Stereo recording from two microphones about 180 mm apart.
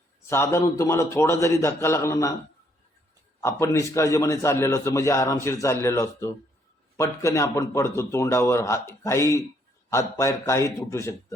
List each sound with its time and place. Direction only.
0.3 s a man's voice: 15° left (ahead or behind)
3.4 s a man's voice: 15° left (ahead or behind)